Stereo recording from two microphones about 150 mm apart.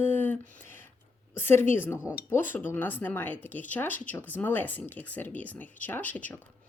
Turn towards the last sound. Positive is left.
turn(degrees=10)  # may be behind; listen again after turning